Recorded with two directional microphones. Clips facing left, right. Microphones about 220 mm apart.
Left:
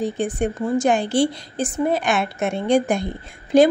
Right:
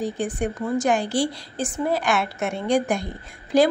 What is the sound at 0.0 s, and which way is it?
A woman's voice, 25° left (ahead or behind).